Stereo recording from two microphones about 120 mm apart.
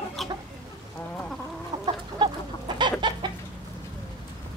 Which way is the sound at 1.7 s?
35° right (ahead or behind).